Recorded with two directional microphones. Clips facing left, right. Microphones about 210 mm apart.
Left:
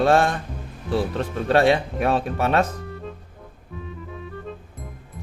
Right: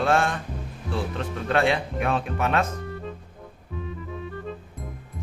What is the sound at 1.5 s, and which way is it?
Speech, 35° left (ahead or behind).